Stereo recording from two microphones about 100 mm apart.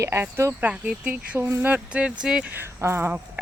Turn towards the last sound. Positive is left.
turn(degrees=-20)  # may be behind; listen again after turning